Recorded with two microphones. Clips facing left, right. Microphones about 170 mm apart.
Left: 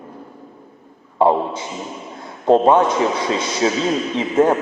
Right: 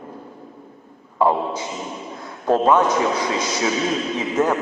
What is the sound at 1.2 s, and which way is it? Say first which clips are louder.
A man's voice: left 3 dB; 25° left (ahead or behind).